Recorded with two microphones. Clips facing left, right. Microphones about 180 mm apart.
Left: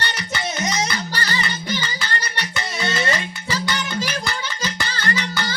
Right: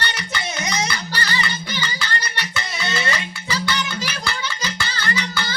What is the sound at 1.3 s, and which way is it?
Music, 45° left (ahead or behind).